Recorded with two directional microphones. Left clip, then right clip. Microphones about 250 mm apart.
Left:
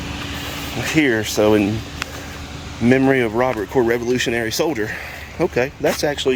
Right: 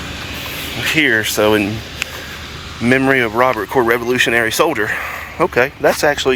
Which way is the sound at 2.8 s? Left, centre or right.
Centre.